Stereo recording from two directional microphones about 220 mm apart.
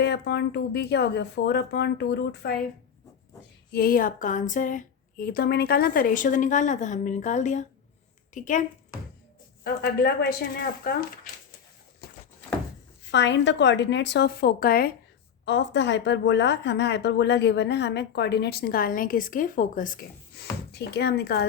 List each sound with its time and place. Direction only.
0.0 s a woman's voice: 50° left (ahead or behind)
3.7 s a woman's voice: 45° left (ahead or behind)
9.6 s a woman's voice: 45° left (ahead or behind)
13.1 s a woman's voice: 55° left (ahead or behind)
15.4 s a woman's voice: 55° left (ahead or behind)